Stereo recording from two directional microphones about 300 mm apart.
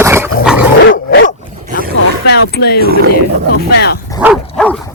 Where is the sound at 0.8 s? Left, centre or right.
Left.